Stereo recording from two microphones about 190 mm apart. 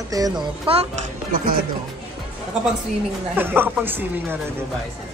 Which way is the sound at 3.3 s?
10° right (ahead or behind).